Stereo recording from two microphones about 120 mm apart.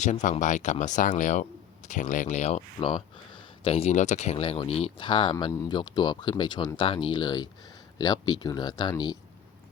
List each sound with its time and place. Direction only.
0.0 s speech: 85° left
2.6 s speech: 45° left (ahead or behind)